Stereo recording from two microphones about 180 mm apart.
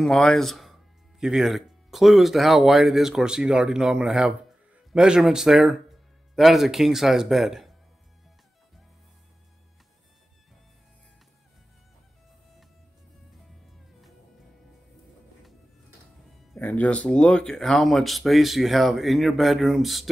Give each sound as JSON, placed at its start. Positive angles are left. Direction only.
{"t": 0.0, "sound": "speech", "side_deg": 5}
{"t": 16.5, "sound": "speech", "side_deg": 10}